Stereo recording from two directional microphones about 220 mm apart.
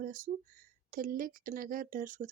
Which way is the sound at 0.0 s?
40° right (ahead or behind).